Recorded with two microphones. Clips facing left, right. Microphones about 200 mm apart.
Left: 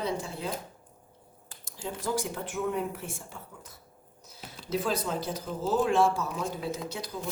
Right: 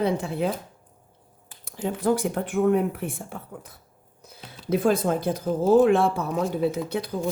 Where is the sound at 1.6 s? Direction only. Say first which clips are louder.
Right 10 dB; 60° right (ahead or behind).